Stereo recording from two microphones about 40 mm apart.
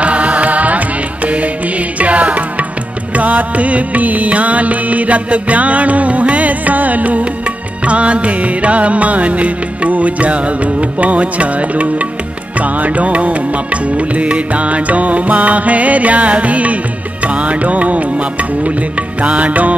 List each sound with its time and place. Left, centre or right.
0.0 s music: right